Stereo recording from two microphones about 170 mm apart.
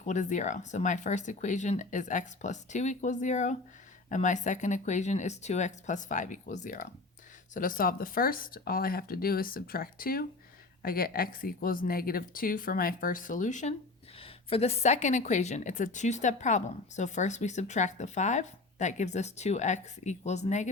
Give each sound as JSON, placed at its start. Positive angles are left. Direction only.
{"t": 0.0, "sound": "a woman's voice", "side_deg": 45}
{"t": 14.2, "sound": "a woman's voice", "side_deg": 35}